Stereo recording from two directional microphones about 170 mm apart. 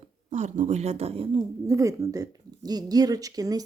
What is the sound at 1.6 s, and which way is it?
A woman's voice, 20° right (ahead or behind).